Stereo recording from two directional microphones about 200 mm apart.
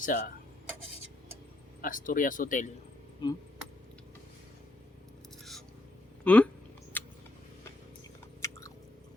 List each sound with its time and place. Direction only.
0.0 s speech: 40° left (ahead or behind)
1.8 s speech: 40° left (ahead or behind)
3.2 s a sound: 20° left (ahead or behind)
6.2 s speech: 5° left (ahead or behind)
6.9 s a sound: 10° left (ahead or behind)
8.4 s chewing: 15° left (ahead or behind)